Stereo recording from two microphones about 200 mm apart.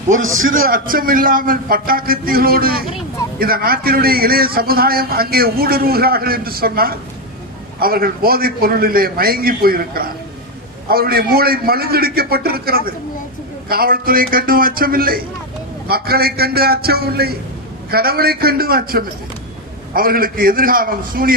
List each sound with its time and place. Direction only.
0.5 s a man's voice: 45° right (ahead or behind)